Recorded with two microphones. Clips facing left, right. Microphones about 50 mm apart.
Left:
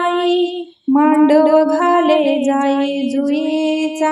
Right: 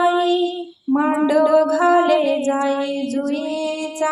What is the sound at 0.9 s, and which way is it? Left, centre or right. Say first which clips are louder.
Music: left 6 dB; left.